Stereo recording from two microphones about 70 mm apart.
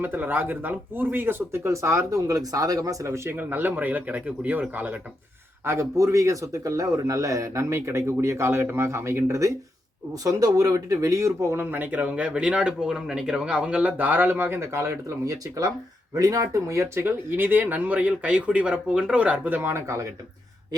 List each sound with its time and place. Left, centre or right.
0.0 s speech: right
5.6 s a man's voice: right
11.5 s speech: right
17.0 s speech: right